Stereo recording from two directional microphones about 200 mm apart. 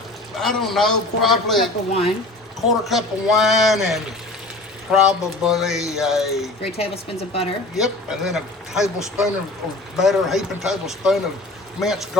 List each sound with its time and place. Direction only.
0.3 s speech: centre (ahead or behind)
6.7 s speech: 30° left (ahead or behind)
7.8 s speech: centre (ahead or behind)